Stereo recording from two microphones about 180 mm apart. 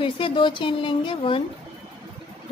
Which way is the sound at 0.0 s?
30° left (ahead or behind).